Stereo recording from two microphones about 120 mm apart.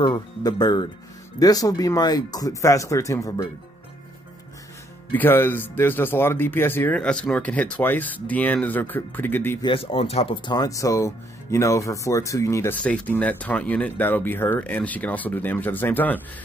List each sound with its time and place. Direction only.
0.0 s speech: 35° left (ahead or behind)
5.1 s speech: 20° left (ahead or behind)
9.6 s speech: 45° left (ahead or behind)
10.3 s speech: 40° left (ahead or behind)
12.8 s speech: 10° left (ahead or behind)